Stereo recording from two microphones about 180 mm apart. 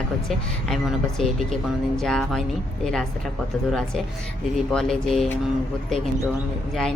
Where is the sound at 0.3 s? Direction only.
Centre (ahead or behind).